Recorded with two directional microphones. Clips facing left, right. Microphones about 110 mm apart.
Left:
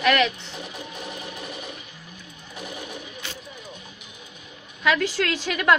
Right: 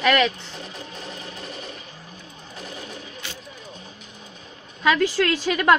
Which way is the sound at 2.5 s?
10° left (ahead or behind).